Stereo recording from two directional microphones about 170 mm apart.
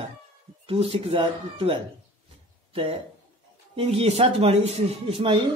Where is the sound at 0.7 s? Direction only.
35° right (ahead or behind).